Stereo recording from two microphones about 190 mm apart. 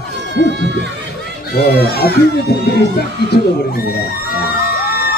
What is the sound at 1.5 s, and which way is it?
Speech, 55° left (ahead or behind).